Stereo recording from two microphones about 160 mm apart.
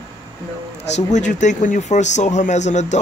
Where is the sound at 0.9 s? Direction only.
50° left (ahead or behind).